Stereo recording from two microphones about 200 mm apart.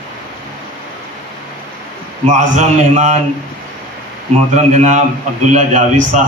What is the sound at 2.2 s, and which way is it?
Speech, 35° right (ahead or behind).